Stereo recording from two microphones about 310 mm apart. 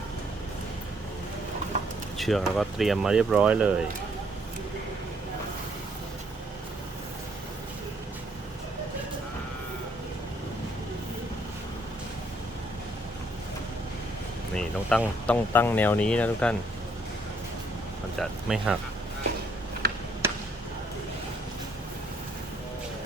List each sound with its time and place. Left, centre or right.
2.1 s speech: centre
14.5 s speech: centre
18.2 s speech: centre
19.8 s a sound: right